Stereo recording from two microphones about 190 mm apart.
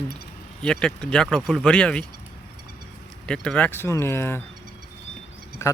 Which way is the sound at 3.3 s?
5° left (ahead or behind).